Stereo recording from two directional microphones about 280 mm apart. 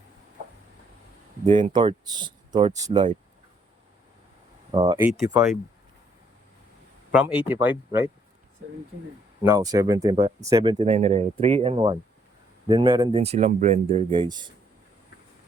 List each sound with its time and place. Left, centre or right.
1.5 s speech: centre
4.7 s speech: centre
7.1 s speech: centre
9.4 s speech: centre